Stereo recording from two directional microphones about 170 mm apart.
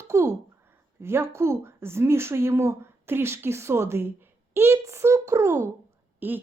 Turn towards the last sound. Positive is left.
turn(degrees=-10)  # may be behind; listen again after turning